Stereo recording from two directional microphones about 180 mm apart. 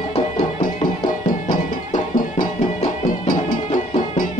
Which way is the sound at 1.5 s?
50° left (ahead or behind).